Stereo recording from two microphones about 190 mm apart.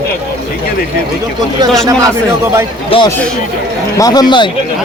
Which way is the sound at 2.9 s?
30° left (ahead or behind).